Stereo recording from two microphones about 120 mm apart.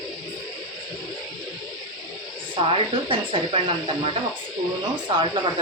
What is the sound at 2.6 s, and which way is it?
Speech, 45° right (ahead or behind).